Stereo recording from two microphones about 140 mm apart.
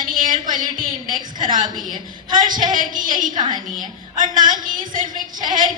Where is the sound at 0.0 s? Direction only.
75° right (ahead or behind).